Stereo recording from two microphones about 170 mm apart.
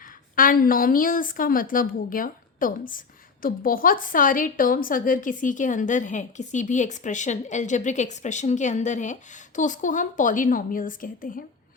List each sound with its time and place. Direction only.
0.3 s a woman's voice: 55° left (ahead or behind)